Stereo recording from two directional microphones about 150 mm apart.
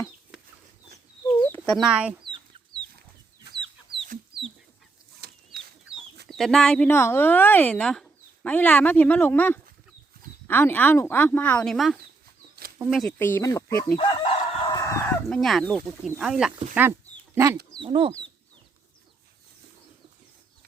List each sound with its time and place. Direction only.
1.4 s chicken: 15° left (ahead or behind)
1.7 s speech: 5° right (ahead or behind)
6.2 s speech: centre (ahead or behind)
6.8 s speech: 15° left (ahead or behind)
13.1 s speech: 15° left (ahead or behind)
14.1 s chicken: 35° left (ahead or behind)
14.8 s chicken: 20° left (ahead or behind)
15.3 s speech: centre (ahead or behind)
16.7 s dog: 15° right (ahead or behind)
17.8 s speech: 35° right (ahead or behind)